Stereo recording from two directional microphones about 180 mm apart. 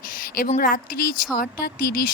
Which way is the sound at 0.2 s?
50° left (ahead or behind).